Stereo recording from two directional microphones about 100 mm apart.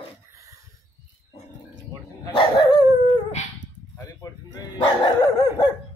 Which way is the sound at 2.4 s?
60° left (ahead or behind).